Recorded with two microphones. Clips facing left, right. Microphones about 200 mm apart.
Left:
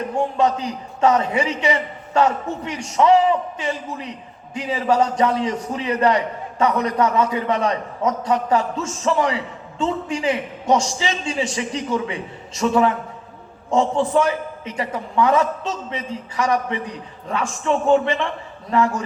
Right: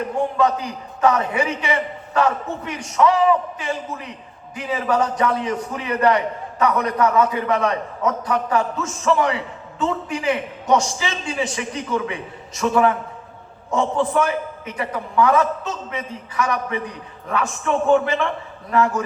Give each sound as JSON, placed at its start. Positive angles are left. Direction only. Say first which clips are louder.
{"t": 0.3, "sound": "a man's voice", "louder": "even", "side_deg": 25}
{"t": 18.7, "sound": "a man's voice", "louder": "even", "side_deg": 25}